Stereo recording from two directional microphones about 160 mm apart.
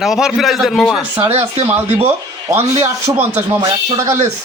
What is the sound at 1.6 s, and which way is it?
A man's voice, 15° right (ahead or behind).